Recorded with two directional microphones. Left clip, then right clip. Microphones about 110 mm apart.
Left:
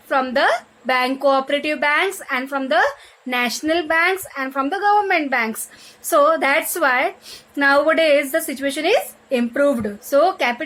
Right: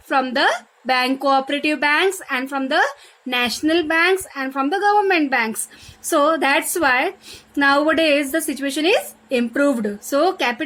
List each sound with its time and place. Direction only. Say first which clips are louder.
0.1 s a woman's voice: left 1 dB; 40° right (ahead or behind)